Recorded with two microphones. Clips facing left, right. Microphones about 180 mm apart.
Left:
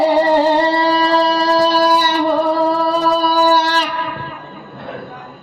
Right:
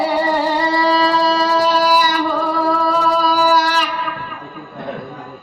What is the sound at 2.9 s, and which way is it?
Music, 30° left (ahead or behind).